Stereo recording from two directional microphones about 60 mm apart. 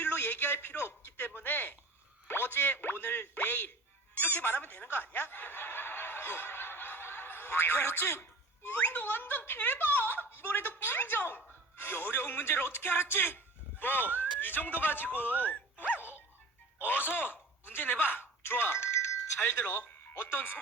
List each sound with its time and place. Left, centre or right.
0.0 s a sound: left
1.2 s a sound: left
2.2 s plop: left
4.1 s snicker: left
9.5 s a woman's voice: left
20.2 s speech: left